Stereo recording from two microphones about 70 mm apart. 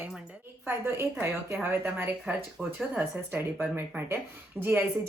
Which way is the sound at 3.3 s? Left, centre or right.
Right.